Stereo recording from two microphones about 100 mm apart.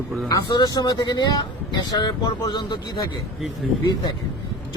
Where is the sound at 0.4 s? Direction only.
45° left (ahead or behind).